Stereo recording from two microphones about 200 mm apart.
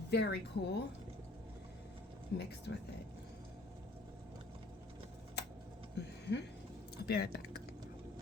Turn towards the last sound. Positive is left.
turn(degrees=55)  # may be behind; listen again after turning